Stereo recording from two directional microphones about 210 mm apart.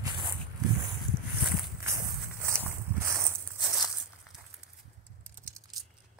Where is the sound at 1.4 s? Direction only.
Centre (ahead or behind).